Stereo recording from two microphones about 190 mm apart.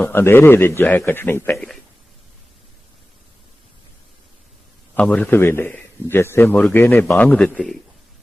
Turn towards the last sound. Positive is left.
turn(degrees=5)  # may be behind; listen again after turning